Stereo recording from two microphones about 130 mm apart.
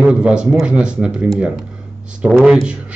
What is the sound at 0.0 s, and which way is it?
Speech, 5° right (ahead or behind).